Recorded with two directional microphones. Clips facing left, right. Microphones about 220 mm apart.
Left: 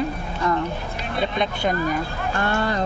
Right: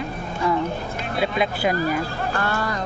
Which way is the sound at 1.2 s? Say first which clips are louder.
Right 1 dB; 5° right (ahead or behind).